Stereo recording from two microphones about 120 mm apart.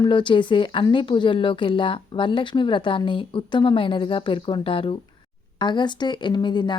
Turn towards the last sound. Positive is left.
turn(degrees=40)  # may be behind; listen again after turning